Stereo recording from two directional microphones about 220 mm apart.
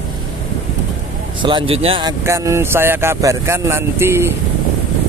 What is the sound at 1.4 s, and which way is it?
Speech, 20° right (ahead or behind).